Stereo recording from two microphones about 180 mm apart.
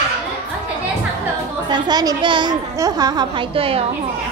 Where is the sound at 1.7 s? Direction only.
25° right (ahead or behind).